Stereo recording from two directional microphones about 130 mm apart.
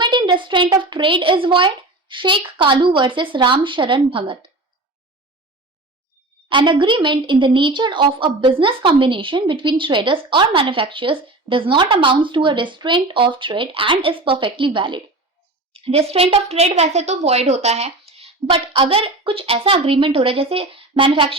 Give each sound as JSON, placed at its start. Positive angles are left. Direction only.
{"t": 0.0, "sound": "a woman's voice", "side_deg": -35}
{"t": 6.5, "sound": "a woman's voice", "side_deg": -40}